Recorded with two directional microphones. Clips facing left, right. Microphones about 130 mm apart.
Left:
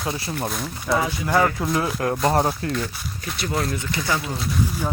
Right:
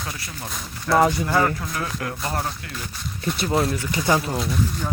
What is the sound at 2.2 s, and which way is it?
Speech, 40° left (ahead or behind).